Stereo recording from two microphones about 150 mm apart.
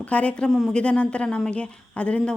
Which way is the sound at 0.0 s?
10° left (ahead or behind).